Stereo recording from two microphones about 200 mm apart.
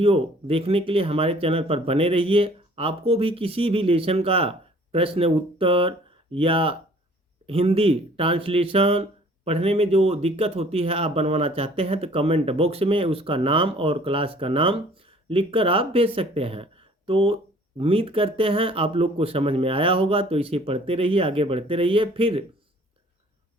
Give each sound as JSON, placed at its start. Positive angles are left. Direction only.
{"t": 0.0, "sound": "speech", "side_deg": -30}